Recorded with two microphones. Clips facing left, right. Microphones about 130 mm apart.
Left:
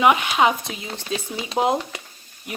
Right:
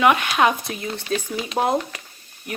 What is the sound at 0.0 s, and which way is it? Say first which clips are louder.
Speech: even; 15° left (ahead or behind).